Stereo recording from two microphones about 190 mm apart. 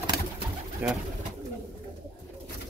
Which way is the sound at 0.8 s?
5° right (ahead or behind).